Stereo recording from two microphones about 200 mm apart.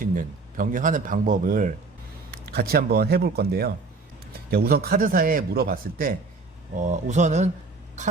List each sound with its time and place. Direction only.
0.0 s speech: 40° right (ahead or behind)